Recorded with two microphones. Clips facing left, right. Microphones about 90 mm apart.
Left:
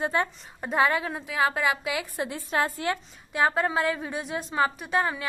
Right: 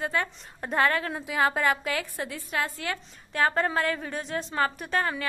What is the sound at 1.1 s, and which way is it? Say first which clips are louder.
A woman's voice: even; centre (ahead or behind).